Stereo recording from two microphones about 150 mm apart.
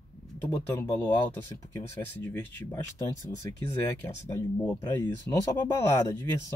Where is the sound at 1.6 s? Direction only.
15° left (ahead or behind).